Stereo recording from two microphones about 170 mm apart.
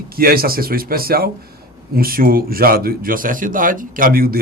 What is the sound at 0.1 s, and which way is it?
Speech, 60° right (ahead or behind).